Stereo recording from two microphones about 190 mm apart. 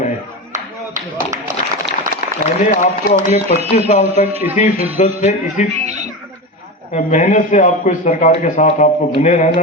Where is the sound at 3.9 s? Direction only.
40° left (ahead or behind).